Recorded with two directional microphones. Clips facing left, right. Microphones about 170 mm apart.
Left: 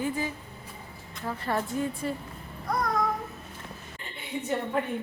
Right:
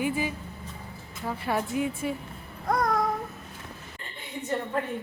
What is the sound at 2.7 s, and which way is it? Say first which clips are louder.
Child singing: right 3 dB; 50° right (ahead or behind).